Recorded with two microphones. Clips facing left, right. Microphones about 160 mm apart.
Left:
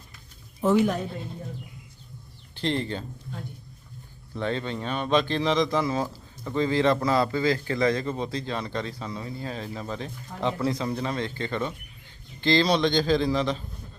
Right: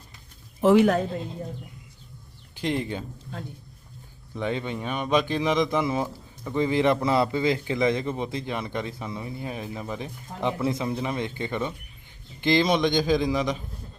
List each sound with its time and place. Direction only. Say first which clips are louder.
0.6 s a woman's voice: right 4 dB; 90° right
2.6 s a man's voice: even; 10° right (ahead or behind)
4.4 s a man's voice: even; 15° right (ahead or behind)